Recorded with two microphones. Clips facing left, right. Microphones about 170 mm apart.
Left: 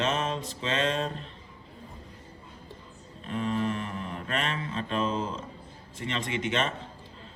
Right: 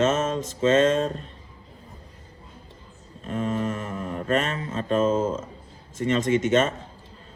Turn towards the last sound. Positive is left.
turn(degrees=-45)  # may be behind; listen again after turning